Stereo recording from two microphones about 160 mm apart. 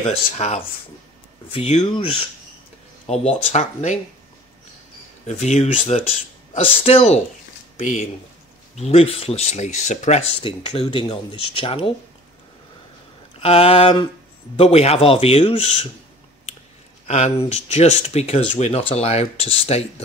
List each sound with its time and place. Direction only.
0.1 s speech: 40° left (ahead or behind)
3.1 s speech: 45° left (ahead or behind)
5.2 s speech: 45° left (ahead or behind)
7.7 s speech: 50° left (ahead or behind)
10.4 s speech: 35° left (ahead or behind)
13.4 s speech: 40° left (ahead or behind)
17.1 s speech: 40° left (ahead or behind)